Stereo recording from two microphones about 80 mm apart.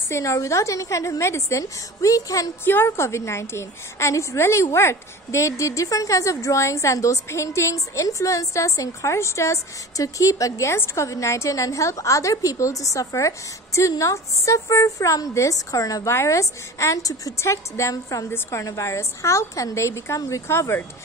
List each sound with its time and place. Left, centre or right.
0.1 s a woman's voice: left
2.6 s a woman's voice: left